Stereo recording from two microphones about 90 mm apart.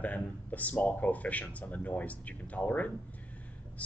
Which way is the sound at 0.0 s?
15° left (ahead or behind).